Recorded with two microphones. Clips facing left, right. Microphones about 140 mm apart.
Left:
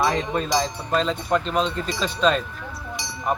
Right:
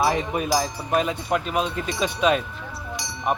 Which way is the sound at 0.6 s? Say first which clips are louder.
Even; 10° right (ahead or behind).